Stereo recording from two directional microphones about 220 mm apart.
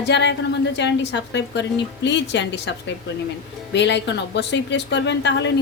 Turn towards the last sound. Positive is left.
turn(degrees=50)  # may be behind; listen again after turning